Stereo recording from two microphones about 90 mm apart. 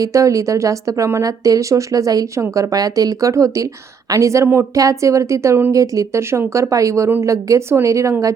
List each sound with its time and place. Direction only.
0.0 s a woman's voice: 35° right (ahead or behind)